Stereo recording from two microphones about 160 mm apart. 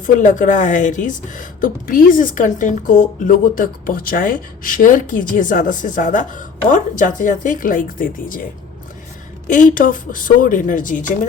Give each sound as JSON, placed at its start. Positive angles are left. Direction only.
{"t": 0.0, "sound": "speech", "side_deg": 50}
{"t": 9.5, "sound": "speech", "side_deg": 55}